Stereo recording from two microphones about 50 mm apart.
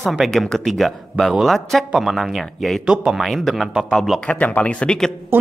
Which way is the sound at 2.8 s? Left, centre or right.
Centre.